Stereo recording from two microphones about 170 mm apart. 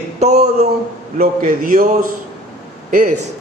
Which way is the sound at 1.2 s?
55° right (ahead or behind).